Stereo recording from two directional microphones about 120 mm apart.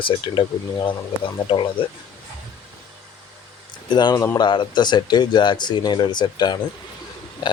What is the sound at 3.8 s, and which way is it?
Speech, 40° left (ahead or behind).